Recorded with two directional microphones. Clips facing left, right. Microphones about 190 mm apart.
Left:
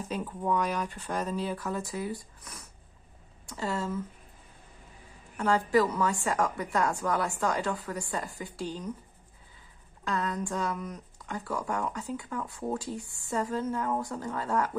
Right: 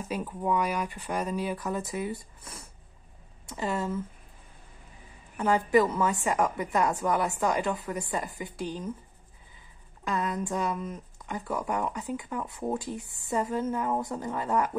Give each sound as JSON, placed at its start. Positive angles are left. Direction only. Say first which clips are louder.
{"t": 0.1, "sound": "speech", "louder": "right 1 dB", "side_deg": -10}
{"t": 3.4, "sound": "speech", "louder": "right 2 dB", "side_deg": -20}
{"t": 5.4, "sound": "speech", "louder": "right 2 dB", "side_deg": -20}
{"t": 10.0, "sound": "speech", "louder": "right 1 dB", "side_deg": -15}